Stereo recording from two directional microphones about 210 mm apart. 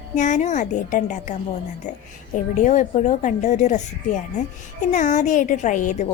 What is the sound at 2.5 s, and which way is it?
A woman's voice, 35° left (ahead or behind).